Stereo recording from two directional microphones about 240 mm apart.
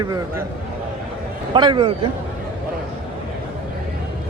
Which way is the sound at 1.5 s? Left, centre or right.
Centre.